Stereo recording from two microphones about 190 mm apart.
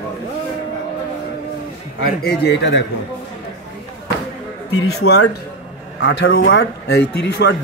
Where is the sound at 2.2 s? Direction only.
65° left (ahead or behind).